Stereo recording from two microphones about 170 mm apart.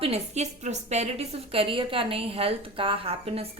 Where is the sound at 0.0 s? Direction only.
40° right (ahead or behind).